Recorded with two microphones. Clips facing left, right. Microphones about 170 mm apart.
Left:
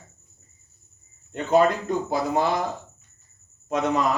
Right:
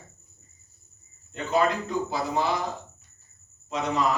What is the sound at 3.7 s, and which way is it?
Speech, 50° left (ahead or behind).